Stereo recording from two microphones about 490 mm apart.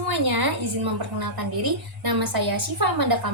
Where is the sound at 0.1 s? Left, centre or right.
Right.